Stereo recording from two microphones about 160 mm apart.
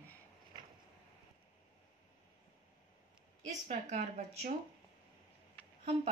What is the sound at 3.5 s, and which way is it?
Speech, 45° right (ahead or behind).